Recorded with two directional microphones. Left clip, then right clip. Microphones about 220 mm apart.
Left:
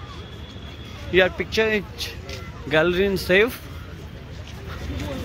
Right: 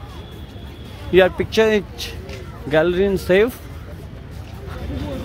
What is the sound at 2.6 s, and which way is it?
Speech, 10° right (ahead or behind).